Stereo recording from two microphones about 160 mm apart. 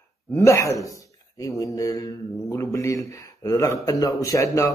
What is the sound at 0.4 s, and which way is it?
A man's voice, 20° left (ahead or behind).